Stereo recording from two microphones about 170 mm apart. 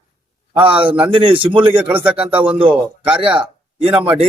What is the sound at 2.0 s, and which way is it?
Speech, 10° right (ahead or behind).